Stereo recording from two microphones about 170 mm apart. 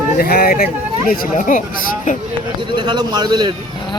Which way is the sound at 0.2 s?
65° left (ahead or behind).